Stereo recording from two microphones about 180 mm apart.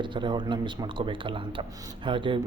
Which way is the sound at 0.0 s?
25° right (ahead or behind).